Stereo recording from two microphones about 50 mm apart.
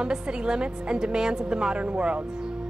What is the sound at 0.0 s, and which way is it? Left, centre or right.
A woman's voice, centre.